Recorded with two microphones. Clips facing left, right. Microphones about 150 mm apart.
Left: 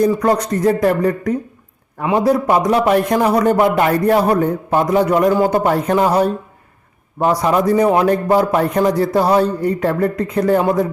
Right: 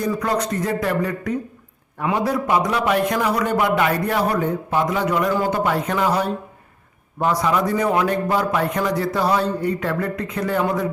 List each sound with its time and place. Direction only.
0.0 s a man's voice: 40° left (ahead or behind)